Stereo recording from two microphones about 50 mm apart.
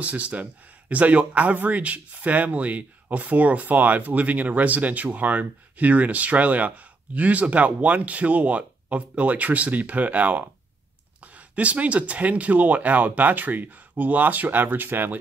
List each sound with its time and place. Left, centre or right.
0.0 s speech: right